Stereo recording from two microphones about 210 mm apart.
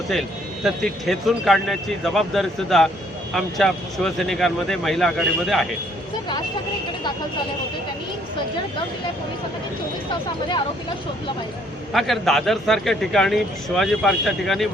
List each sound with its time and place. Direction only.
0.1 s speech: centre (ahead or behind)
10.1 s speech: 20° left (ahead or behind)
11.9 s speech: centre (ahead or behind)